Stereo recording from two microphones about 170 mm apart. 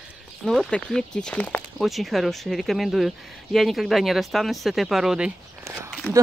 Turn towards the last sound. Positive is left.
turn(degrees=-15)  # may be behind; listen again after turning